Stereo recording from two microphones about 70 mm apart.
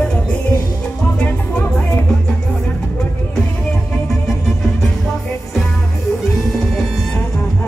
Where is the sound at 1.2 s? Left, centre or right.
Left.